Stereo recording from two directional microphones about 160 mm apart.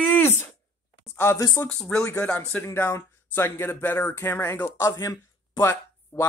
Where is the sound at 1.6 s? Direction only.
5° left (ahead or behind).